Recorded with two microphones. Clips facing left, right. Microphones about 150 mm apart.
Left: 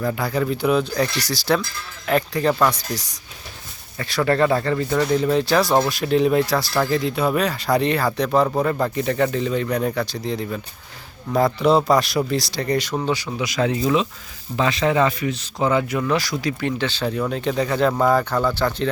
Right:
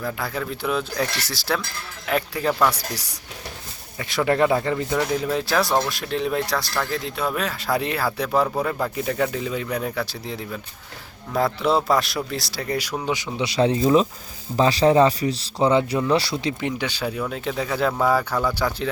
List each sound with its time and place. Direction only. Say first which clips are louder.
0.0 s speech: left 5 dB; centre (ahead or behind)
13.1 s speech: left 1 dB; 20° right (ahead or behind)